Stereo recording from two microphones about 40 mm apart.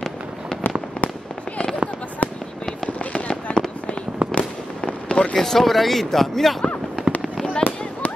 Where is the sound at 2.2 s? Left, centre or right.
Left.